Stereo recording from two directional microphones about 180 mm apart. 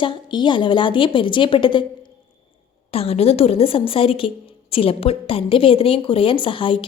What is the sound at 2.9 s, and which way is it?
A woman's voice, 35° left (ahead or behind).